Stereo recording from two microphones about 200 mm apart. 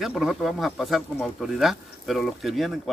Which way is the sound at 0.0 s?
Centre (ahead or behind).